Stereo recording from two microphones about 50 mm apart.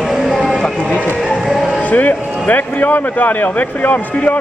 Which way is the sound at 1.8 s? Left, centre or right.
Left.